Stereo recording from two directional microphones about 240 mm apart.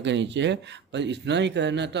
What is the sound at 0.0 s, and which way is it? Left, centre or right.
A man's voice, right.